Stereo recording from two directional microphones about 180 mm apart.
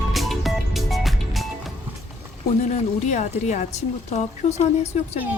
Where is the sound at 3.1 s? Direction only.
40° left (ahead or behind).